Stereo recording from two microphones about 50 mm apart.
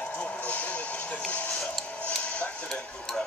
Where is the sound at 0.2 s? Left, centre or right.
Left.